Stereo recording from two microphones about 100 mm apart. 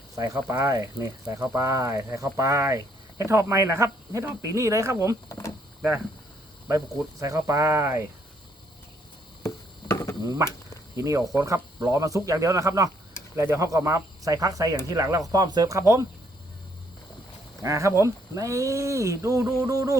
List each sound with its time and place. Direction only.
0.2 s speech: 40° right (ahead or behind)
5.3 s speech: 30° left (ahead or behind)
6.7 s speech: 35° right (ahead or behind)
9.9 s a sound: 25° left (ahead or behind)
10.9 s speech: 35° right (ahead or behind)
17.6 s speech: 30° right (ahead or behind)